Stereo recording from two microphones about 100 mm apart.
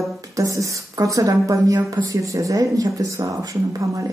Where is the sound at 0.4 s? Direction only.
30° right (ahead or behind).